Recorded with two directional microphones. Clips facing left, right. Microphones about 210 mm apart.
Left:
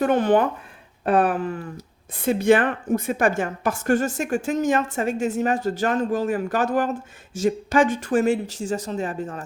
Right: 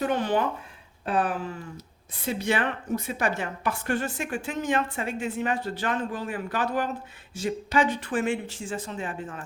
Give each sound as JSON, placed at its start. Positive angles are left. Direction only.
{"t": 0.0, "sound": "a woman's voice", "side_deg": 55}